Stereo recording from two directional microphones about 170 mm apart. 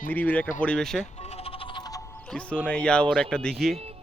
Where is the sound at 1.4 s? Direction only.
35° left (ahead or behind).